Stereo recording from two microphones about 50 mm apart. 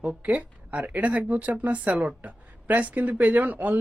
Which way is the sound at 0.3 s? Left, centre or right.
Right.